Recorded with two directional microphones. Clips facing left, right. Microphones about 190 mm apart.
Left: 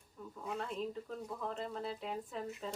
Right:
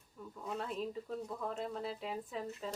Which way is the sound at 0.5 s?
5° right (ahead or behind).